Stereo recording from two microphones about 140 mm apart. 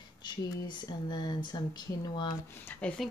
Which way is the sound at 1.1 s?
30° left (ahead or behind).